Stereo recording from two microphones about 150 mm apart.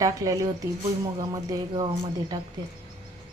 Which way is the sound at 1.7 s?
40° right (ahead or behind).